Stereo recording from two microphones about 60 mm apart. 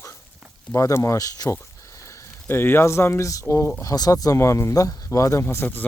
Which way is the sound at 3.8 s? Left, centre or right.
Left.